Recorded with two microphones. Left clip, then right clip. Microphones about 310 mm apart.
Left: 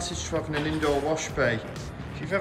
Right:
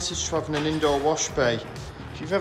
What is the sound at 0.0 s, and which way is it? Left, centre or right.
A man's voice, centre.